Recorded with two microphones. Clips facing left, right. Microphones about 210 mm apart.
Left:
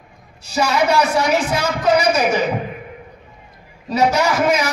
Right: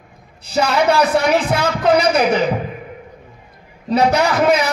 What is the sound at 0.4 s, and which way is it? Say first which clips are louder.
Speech: right 1 dB; 60° right (ahead or behind).